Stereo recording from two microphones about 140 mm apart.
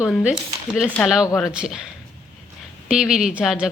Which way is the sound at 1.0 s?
5° left (ahead or behind).